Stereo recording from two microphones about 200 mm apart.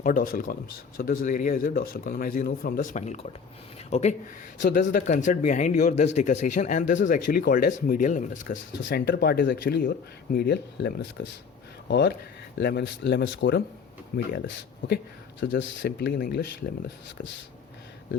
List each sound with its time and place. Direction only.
0.0 s speech: 45° left (ahead or behind)
4.6 s speech: 45° left (ahead or behind)
8.8 s speech: 55° left (ahead or behind)
14.1 s speech: 45° left (ahead or behind)
15.4 s speech: 65° left (ahead or behind)